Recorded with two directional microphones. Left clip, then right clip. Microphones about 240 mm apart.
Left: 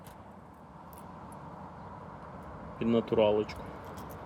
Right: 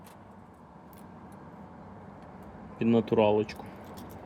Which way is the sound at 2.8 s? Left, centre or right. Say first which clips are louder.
Right 2 dB; right.